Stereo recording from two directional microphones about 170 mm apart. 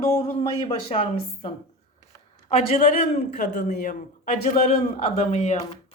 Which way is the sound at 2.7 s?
40° left (ahead or behind).